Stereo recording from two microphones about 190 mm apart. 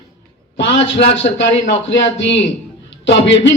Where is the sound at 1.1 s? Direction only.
35° left (ahead or behind).